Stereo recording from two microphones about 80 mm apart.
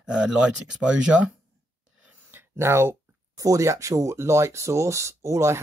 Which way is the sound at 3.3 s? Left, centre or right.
Right.